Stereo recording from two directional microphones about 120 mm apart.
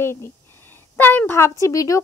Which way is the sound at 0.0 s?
20° left (ahead or behind).